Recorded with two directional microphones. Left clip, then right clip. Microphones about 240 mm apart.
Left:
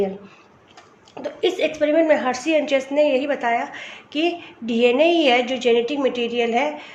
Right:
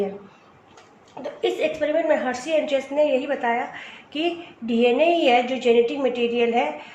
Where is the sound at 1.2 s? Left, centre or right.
Left.